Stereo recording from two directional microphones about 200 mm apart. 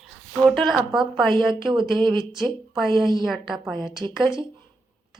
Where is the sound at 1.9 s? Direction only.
20° right (ahead or behind).